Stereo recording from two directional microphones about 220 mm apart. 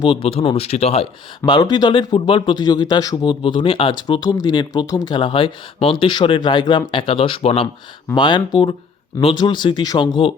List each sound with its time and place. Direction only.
0.0 s speech: 20° left (ahead or behind)
1.4 s speech: 20° left (ahead or behind)